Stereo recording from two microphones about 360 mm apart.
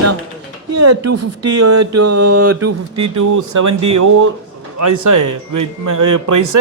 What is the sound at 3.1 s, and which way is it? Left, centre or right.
A woman's voice, right.